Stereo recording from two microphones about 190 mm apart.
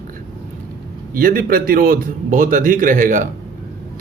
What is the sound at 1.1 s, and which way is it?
A man's voice, 50° right (ahead or behind).